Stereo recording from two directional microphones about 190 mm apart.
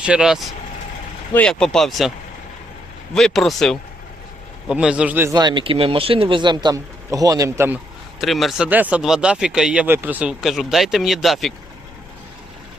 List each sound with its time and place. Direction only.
0.0 s speech: 5° right (ahead or behind)
3.2 s speech: centre (ahead or behind)
5.3 s speech: 20° right (ahead or behind)
8.2 s speech: centre (ahead or behind)